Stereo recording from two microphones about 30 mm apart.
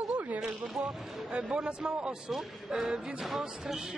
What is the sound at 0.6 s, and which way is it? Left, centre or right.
Speech, centre.